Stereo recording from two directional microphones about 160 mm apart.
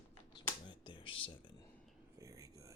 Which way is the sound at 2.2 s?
20° right (ahead or behind).